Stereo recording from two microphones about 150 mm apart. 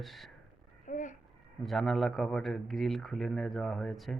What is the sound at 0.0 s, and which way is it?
Speech, centre (ahead or behind).